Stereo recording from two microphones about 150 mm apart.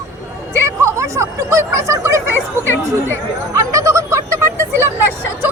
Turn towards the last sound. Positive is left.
turn(degrees=-15)  # may be behind; listen again after turning